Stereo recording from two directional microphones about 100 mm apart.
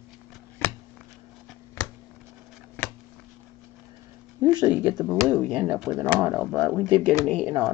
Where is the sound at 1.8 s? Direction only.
30° left (ahead or behind).